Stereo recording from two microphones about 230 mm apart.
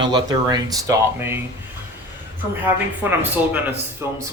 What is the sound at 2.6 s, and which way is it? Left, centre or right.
Speech, centre.